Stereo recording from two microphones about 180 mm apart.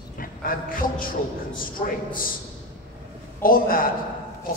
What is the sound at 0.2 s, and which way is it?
Speech, 50° left (ahead or behind).